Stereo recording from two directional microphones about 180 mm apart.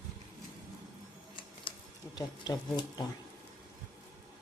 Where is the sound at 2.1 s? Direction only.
25° left (ahead or behind).